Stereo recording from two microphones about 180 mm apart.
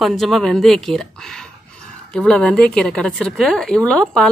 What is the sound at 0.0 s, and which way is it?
A woman's voice, centre (ahead or behind).